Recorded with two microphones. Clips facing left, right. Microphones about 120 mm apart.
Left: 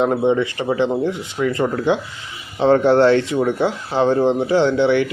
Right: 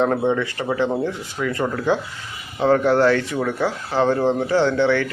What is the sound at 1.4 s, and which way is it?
Speech, 35° left (ahead or behind).